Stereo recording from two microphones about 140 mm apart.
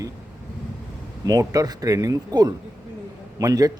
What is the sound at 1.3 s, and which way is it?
A man's voice, 25° right (ahead or behind).